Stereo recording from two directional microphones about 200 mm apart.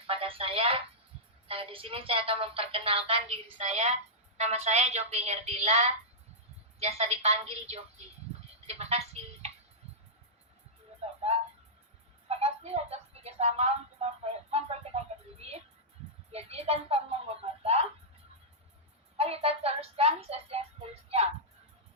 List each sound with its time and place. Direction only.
0.1 s speech: 25° right (ahead or behind)
8.6 s a sound: 30° right (ahead or behind)
12.3 s music: 30° right (ahead or behind)
16.3 s speech: 30° right (ahead or behind)
19.1 s a child's voice: 30° right (ahead or behind)